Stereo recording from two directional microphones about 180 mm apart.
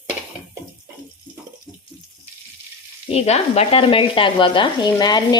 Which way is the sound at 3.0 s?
35° left (ahead or behind).